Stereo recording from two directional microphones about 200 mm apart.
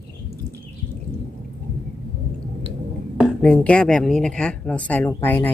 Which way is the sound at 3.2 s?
5° left (ahead or behind).